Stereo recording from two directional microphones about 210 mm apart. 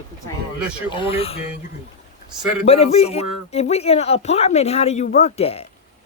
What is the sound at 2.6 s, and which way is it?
Speech, 30° left (ahead or behind).